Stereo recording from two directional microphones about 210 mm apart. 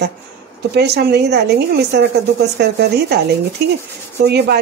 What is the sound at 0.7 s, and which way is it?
Speech, 50° right (ahead or behind).